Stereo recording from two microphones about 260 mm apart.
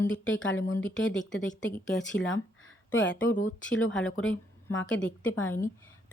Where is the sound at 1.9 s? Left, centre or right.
Left.